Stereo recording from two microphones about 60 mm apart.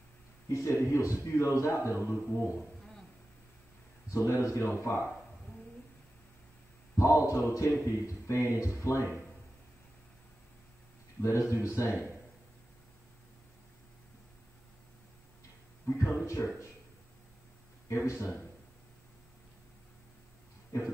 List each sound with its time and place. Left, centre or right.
0.5 s a man's voice: left
4.1 s a man's voice: left
7.0 s a man's voice: left
11.1 s a man's voice: left
15.9 s a man's voice: left
17.8 s speech: left